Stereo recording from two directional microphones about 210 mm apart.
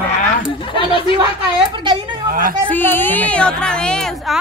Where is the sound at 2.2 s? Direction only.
45° right (ahead or behind).